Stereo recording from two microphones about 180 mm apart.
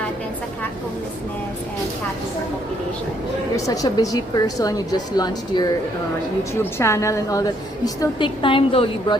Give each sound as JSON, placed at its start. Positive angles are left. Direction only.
{"t": 3.5, "sound": "a woman's voice", "side_deg": 20}